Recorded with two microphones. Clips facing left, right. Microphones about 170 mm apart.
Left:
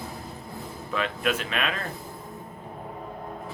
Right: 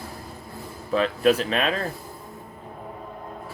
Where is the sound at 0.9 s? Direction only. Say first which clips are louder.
Right 8 dB; 35° right (ahead or behind).